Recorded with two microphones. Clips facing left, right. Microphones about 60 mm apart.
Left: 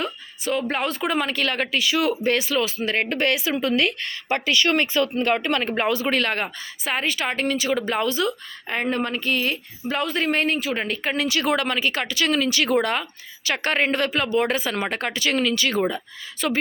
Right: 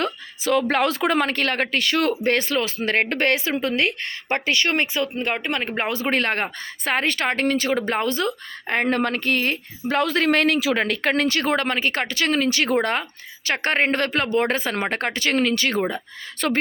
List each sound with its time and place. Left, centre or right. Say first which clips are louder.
0.0 s speech: right 3 dB; right
6.8 s speech: right 3 dB; right
9.9 s speech: right 4 dB; right
16.4 s speech: right 1 dB; right